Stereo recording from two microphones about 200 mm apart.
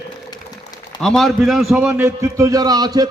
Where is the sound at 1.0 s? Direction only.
Centre (ahead or behind).